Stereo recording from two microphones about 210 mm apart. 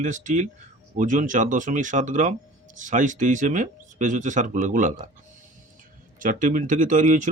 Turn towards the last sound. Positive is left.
turn(degrees=-35)  # may be behind; listen again after turning